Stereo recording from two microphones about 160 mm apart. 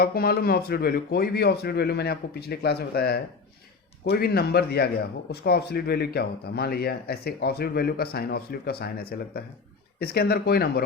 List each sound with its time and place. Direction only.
0.0 s a man's voice: 70° left (ahead or behind)